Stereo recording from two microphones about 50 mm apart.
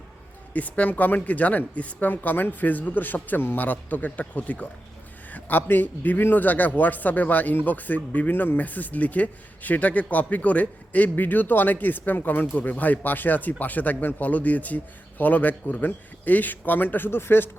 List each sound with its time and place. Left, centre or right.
0.5 s speech: left